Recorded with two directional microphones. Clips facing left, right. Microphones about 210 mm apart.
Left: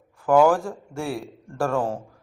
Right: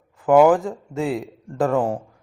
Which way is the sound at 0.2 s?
20° right (ahead or behind).